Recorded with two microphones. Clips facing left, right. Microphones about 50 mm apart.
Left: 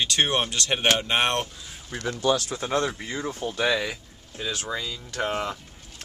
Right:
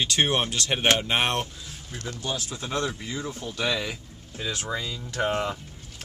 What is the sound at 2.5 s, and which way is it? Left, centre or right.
Speech, left.